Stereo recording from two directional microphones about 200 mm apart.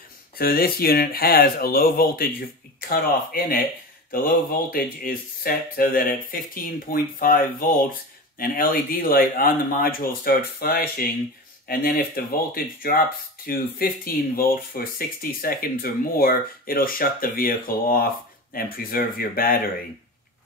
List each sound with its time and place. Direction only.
0.4 s speech: 50° left (ahead or behind)
4.6 s speech: 45° left (ahead or behind)